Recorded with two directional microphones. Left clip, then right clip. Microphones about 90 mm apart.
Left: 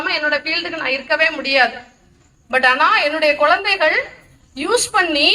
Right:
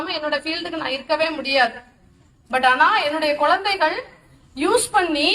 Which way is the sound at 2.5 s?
35° left (ahead or behind).